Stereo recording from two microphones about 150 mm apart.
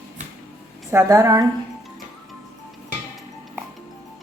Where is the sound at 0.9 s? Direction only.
20° right (ahead or behind).